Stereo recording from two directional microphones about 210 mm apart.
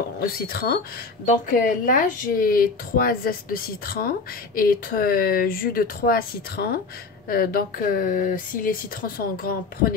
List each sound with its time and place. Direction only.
0.5 s speech: 50° left (ahead or behind)